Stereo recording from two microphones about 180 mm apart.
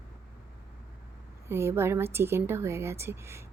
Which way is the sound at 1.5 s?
15° right (ahead or behind).